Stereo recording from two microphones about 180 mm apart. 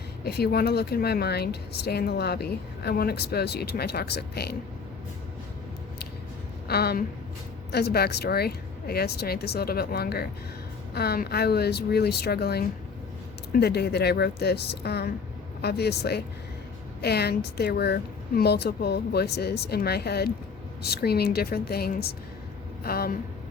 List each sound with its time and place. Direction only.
0.3 s speech: 60° left (ahead or behind)
6.7 s a woman's voice: 60° left (ahead or behind)